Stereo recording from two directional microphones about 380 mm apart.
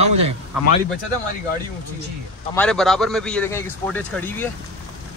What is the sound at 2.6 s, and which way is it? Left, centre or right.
A man's voice, centre.